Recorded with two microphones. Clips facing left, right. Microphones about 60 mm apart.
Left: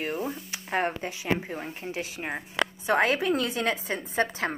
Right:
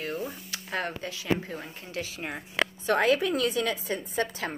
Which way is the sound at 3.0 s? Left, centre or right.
Left.